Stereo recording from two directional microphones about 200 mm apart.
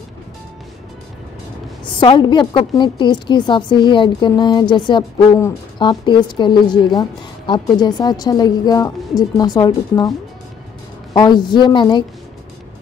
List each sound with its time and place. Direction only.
2.0 s a woman's voice: 25° left (ahead or behind)
11.1 s a woman's voice: 20° left (ahead or behind)